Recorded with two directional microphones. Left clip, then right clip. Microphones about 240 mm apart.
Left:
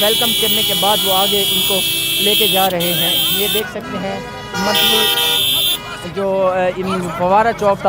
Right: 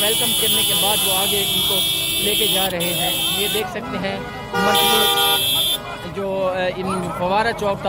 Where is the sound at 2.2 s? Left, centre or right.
Centre.